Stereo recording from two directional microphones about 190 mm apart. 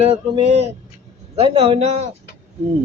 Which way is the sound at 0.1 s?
35° right (ahead or behind).